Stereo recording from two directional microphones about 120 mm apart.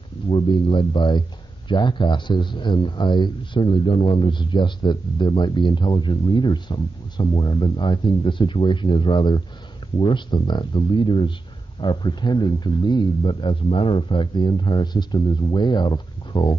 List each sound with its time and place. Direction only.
0.3 s speech: 45° left (ahead or behind)